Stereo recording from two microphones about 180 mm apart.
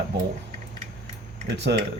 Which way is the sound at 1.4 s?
75° right (ahead or behind).